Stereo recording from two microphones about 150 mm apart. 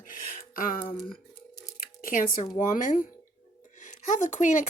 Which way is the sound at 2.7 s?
60° left (ahead or behind).